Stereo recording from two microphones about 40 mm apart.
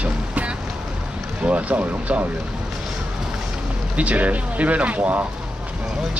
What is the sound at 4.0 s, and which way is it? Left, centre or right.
Speech, right.